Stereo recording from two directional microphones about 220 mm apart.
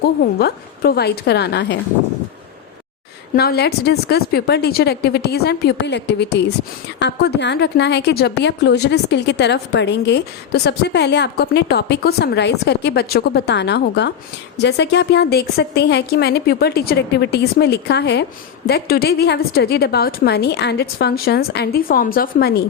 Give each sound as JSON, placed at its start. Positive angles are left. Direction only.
{"t": 0.2, "sound": "a woman's voice", "side_deg": 45}
{"t": 3.3, "sound": "a woman's voice", "side_deg": 45}